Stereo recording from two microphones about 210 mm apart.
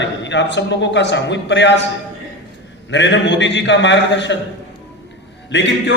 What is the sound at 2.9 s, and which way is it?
A man's voice, 60° left (ahead or behind).